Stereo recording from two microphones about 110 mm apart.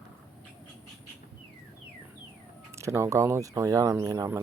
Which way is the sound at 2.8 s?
25° right (ahead or behind).